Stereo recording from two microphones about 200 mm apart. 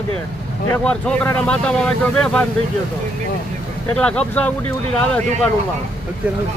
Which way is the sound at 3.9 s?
5° left (ahead or behind).